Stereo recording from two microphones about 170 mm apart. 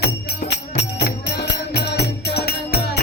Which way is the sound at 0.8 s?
90° left.